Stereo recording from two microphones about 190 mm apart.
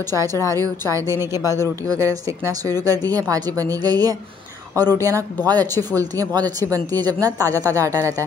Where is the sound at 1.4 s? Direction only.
15° left (ahead or behind).